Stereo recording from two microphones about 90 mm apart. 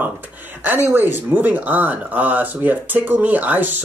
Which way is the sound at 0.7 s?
20° right (ahead or behind).